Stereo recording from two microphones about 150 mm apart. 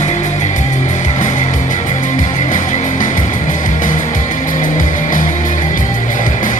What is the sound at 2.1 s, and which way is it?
Music, 60° left (ahead or behind).